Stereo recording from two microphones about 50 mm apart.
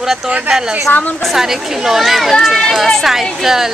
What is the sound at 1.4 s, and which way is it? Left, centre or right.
Speech, centre.